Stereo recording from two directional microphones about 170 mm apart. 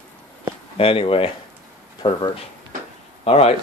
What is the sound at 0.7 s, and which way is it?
Speech, 35° left (ahead or behind).